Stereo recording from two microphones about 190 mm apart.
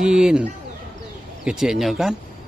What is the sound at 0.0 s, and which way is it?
Speech, 5° right (ahead or behind).